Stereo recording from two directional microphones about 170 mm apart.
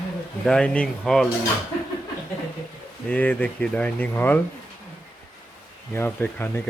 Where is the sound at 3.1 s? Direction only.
10° left (ahead or behind).